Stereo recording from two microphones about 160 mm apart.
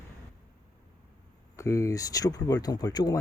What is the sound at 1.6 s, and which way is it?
Speech, 20° left (ahead or behind).